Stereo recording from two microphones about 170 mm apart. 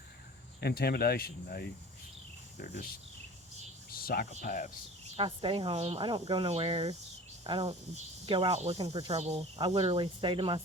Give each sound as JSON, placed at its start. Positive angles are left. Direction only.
{"t": 0.6, "sound": "speech", "side_deg": 65}
{"t": 3.8, "sound": "cricket", "side_deg": 60}
{"t": 4.3, "sound": "speech", "side_deg": 50}
{"t": 5.1, "sound": "speech", "side_deg": -30}